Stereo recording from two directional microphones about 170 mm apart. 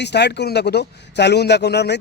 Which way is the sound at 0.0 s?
85° left.